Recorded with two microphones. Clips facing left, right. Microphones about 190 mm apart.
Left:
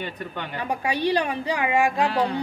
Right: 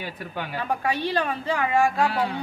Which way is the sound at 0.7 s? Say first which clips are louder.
Left 3 dB; 15° left (ahead or behind).